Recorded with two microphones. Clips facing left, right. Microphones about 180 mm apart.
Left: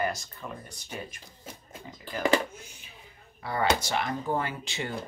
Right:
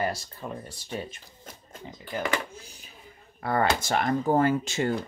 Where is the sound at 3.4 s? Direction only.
50° right (ahead or behind).